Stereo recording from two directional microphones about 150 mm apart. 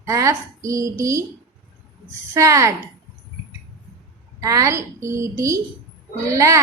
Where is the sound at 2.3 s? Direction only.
20° right (ahead or behind).